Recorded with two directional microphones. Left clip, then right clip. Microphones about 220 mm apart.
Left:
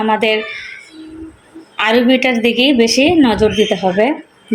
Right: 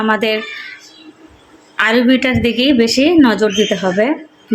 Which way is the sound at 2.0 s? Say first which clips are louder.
Left 1 dB; 35° right (ahead or behind).